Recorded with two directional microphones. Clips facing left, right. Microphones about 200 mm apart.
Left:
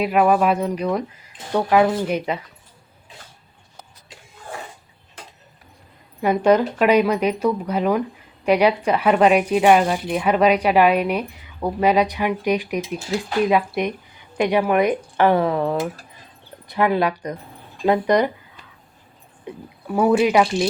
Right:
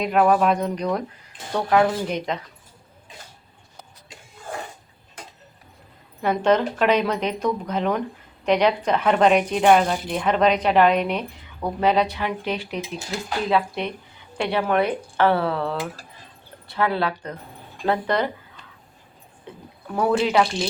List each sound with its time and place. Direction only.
0.0 s speech: 5° left (ahead or behind)
6.2 s speech: 10° left (ahead or behind)